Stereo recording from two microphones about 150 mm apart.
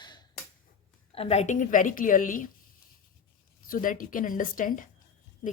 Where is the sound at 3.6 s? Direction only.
65° left (ahead or behind).